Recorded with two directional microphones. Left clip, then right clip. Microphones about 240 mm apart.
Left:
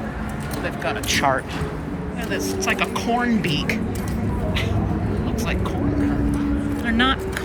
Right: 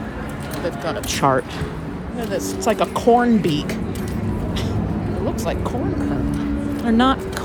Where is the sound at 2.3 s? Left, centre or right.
Centre.